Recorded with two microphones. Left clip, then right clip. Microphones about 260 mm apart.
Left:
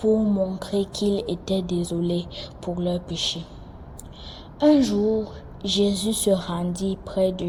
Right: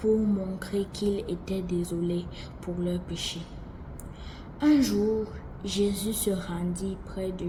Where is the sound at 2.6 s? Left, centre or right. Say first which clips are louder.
Left 6 dB; left.